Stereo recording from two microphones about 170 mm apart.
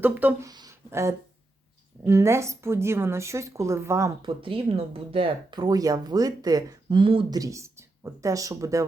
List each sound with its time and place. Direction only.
0.0 s a woman's voice: 10° right (ahead or behind)
0.5 s a sound: 20° right (ahead or behind)
2.0 s a woman's voice: 15° right (ahead or behind)
4.3 s speech: 30° right (ahead or behind)